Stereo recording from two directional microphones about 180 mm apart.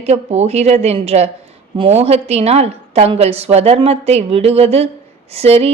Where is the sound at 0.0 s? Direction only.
35° right (ahead or behind).